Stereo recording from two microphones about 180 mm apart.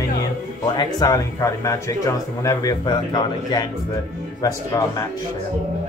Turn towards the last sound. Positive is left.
turn(degrees=20)  # may be behind; listen again after turning